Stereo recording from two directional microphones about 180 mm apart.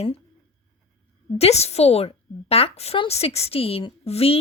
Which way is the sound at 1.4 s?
35° left (ahead or behind).